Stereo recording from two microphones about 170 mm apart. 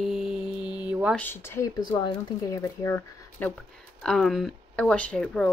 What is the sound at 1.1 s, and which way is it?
Speech, 10° left (ahead or behind).